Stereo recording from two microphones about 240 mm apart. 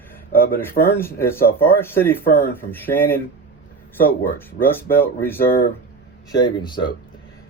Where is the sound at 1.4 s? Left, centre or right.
Left.